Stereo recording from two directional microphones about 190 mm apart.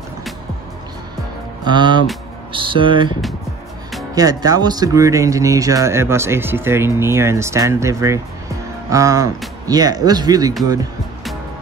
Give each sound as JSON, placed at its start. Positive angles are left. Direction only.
{"t": 1.6, "sound": "speech", "side_deg": -25}